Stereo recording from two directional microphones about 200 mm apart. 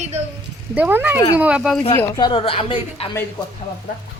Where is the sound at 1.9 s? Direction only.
15° left (ahead or behind).